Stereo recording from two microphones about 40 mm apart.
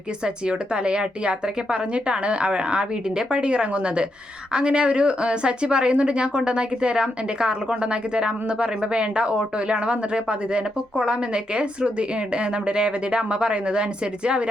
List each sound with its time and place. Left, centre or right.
0.4 s a woman's voice: right